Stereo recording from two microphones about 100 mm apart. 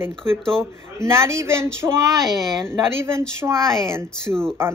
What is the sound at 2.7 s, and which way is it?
Speech, 25° right (ahead or behind).